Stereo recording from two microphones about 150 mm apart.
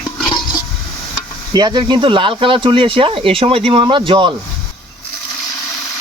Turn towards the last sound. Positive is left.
turn(degrees=-35)  # may be behind; listen again after turning